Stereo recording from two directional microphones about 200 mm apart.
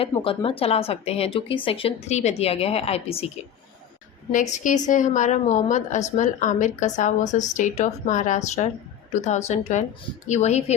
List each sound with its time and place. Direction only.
0.0 s speech: 25° left (ahead or behind)
4.3 s a woman's voice: 40° left (ahead or behind)